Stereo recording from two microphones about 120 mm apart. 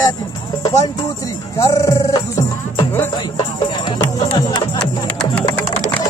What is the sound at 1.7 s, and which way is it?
Music, 30° left (ahead or behind).